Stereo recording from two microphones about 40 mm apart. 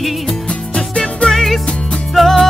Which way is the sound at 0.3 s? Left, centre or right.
Left.